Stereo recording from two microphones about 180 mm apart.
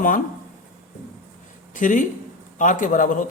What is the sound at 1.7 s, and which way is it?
Speech, 45° left (ahead or behind).